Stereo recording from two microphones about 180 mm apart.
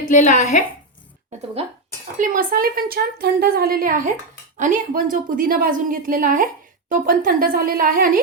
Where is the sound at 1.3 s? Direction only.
35° right (ahead or behind).